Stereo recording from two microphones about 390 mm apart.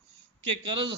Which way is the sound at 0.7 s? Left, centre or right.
Centre.